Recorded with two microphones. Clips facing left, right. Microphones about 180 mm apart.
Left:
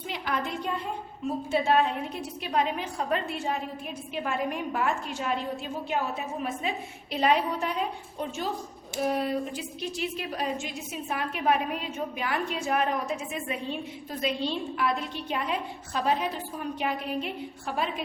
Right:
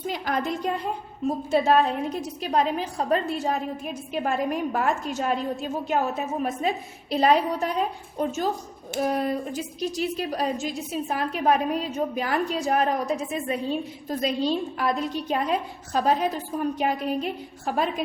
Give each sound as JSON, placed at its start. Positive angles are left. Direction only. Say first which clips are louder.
{"t": 0.1, "sound": "a woman's voice", "louder": "right 4 dB", "side_deg": -40}